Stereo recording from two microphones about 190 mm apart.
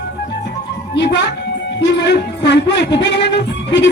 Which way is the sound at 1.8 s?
65° left (ahead or behind).